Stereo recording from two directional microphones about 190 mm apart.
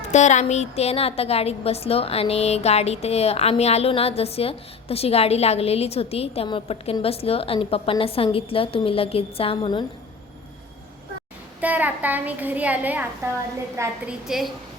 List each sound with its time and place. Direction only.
0.0 s a woman's voice: 40° left (ahead or behind)
11.6 s a child's voice: 10° right (ahead or behind)
14.3 s a woman's voice: centre (ahead or behind)